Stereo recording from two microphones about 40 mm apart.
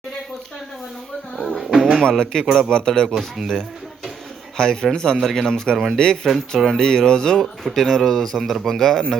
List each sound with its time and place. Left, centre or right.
1.4 s a sound: centre
1.6 s music: centre
2.0 s speech: centre
3.2 s speech: centre
4.5 s speech: centre
5.2 s speech: centre
5.5 s speech: centre
5.7 s speech: centre
6.7 s speech: centre
7.3 s speech: centre